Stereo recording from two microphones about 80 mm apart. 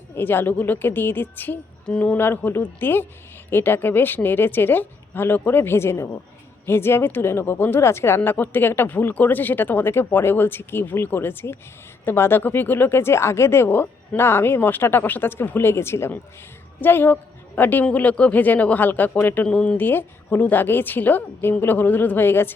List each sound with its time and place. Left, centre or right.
0.2 s a woman's voice: left